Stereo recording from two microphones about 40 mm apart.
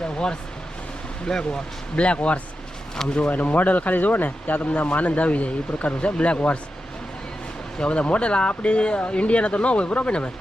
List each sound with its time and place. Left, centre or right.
1.2 s speech: centre
2.0 s speech: left
3.2 s speech: left
7.8 s speech: left